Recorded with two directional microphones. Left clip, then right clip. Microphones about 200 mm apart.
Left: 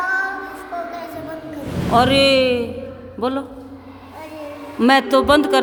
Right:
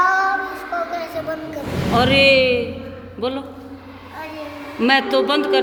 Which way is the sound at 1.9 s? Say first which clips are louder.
Even; 20° left (ahead or behind).